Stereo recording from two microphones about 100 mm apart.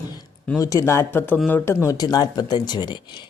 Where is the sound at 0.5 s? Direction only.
35° left (ahead or behind).